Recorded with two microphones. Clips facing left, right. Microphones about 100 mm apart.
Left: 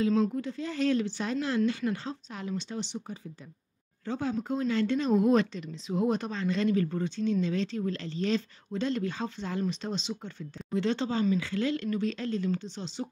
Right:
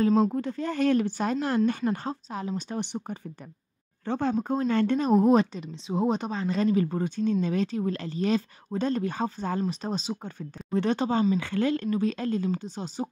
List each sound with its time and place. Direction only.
0.0 s speech: 45° right (ahead or behind)
4.9 s a woman's voice: 35° right (ahead or behind)